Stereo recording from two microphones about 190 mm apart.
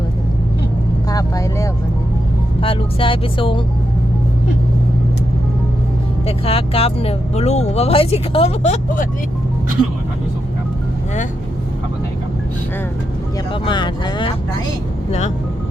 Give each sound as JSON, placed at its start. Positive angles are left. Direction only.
{"t": 1.1, "sound": "vehicle", "side_deg": 15}
{"t": 2.6, "sound": "speech", "side_deg": 25}
{"t": 6.2, "sound": "speech", "side_deg": 30}
{"t": 13.5, "sound": "speech", "side_deg": 25}